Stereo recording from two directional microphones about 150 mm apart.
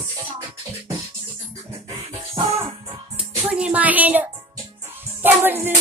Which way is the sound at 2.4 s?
20° right (ahead or behind).